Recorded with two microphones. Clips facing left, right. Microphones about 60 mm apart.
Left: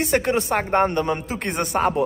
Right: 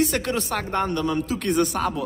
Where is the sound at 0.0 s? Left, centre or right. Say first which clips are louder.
Left 3 dB; left.